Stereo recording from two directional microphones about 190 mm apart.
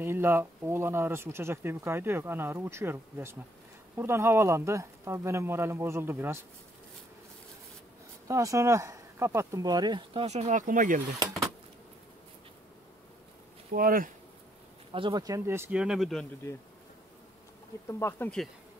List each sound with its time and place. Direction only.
0.0 s speech: 10° right (ahead or behind)
8.3 s speech: 15° right (ahead or behind)
10.2 s speech: 35° right (ahead or behind)
13.7 s speech: 50° right (ahead or behind)
14.9 s speech: 25° right (ahead or behind); by 16.3 s centre (ahead or behind)
17.8 s speech: 15° left (ahead or behind)